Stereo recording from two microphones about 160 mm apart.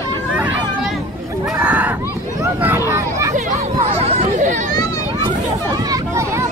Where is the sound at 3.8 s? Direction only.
50° right (ahead or behind).